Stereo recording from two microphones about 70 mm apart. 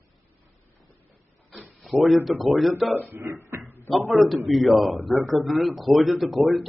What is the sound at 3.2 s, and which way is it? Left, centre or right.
Speech, right.